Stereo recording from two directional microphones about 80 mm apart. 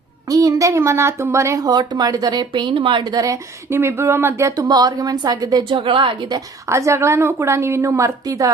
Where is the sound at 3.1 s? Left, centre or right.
Right.